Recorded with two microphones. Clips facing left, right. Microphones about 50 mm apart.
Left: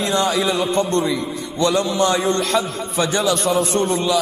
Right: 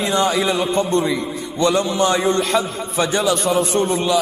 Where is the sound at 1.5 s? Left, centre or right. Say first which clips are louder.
Right 1 dB; centre.